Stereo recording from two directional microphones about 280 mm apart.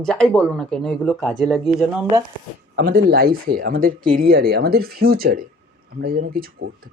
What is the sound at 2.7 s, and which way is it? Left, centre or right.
Speech, right.